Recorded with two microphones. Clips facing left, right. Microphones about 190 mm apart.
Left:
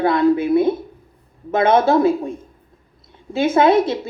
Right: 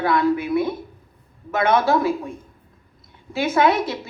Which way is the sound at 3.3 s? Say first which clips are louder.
Left 5 dB; 25° left (ahead or behind).